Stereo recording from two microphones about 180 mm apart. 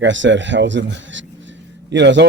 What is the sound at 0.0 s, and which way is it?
A man's voice, 90° right.